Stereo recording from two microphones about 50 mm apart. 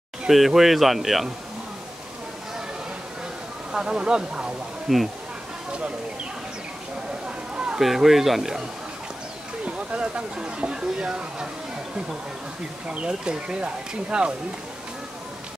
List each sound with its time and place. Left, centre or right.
0.3 s speech: centre
3.7 s speech: centre
4.8 s speech: centre
5.7 s speech: right
7.2 s a sound: centre
7.8 s speech: centre
9.7 s speech: right
12.8 s speech: centre